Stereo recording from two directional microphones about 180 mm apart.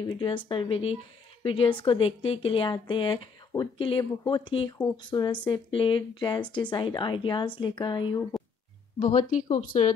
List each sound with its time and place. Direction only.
0.0 s a woman's voice: 25° left (ahead or behind)
9.0 s speech: 40° left (ahead or behind)